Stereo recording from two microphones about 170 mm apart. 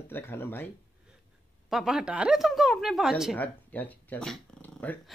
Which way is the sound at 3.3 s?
10° left (ahead or behind).